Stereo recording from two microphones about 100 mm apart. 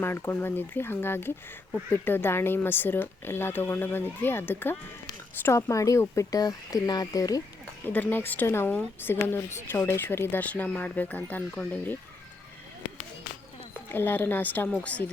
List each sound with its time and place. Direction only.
0.0 s speech: 20° left (ahead or behind)
7.9 s speech: 20° left (ahead or behind)
13.9 s speech: 20° left (ahead or behind)